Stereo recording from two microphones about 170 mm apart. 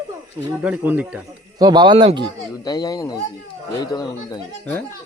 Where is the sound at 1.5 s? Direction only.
25° right (ahead or behind).